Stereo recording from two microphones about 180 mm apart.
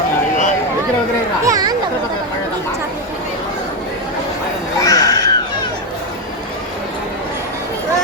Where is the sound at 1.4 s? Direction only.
20° right (ahead or behind).